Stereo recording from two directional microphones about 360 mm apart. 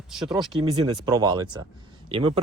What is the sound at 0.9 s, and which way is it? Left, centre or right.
Speech, centre.